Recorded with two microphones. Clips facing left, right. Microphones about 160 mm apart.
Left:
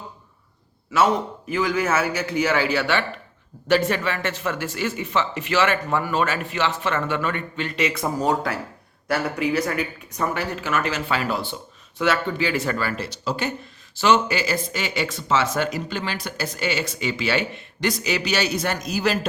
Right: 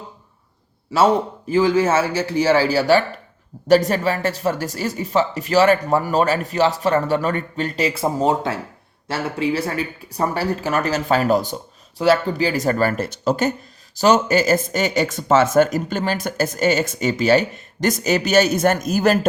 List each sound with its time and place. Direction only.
0.9 s speech: 30° right (ahead or behind); by 19.2 s 50° right (ahead or behind)